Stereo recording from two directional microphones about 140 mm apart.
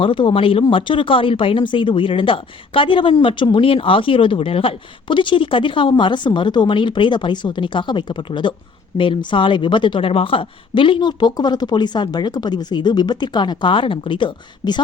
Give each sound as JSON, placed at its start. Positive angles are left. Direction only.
{"t": 0.0, "sound": "speech", "side_deg": 40}